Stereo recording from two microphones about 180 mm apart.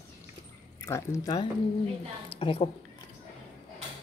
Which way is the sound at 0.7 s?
15° left (ahead or behind).